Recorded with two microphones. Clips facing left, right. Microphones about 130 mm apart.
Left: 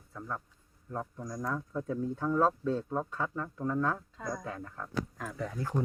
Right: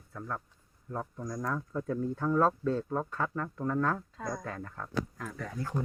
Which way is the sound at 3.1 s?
70° right (ahead or behind).